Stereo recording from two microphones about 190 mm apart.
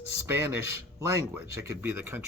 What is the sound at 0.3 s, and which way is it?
Speech, 15° right (ahead or behind).